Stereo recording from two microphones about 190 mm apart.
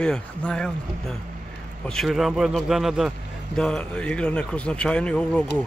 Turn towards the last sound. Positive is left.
turn(degrees=5)  # may be behind; listen again after turning